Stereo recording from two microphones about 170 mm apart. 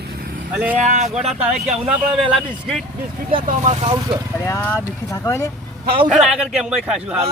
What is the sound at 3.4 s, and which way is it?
Speech, 40° right (ahead or behind).